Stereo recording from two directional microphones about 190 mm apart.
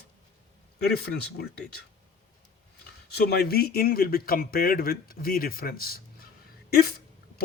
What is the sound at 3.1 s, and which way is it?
Speech, 60° left (ahead or behind).